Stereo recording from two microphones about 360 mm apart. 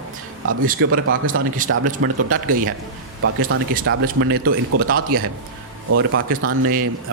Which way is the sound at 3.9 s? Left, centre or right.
Right.